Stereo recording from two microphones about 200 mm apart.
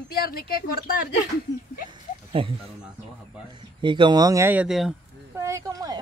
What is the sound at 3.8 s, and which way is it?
Speech, 25° right (ahead or behind).